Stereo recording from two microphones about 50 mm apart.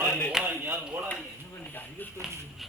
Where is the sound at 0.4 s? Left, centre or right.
Right.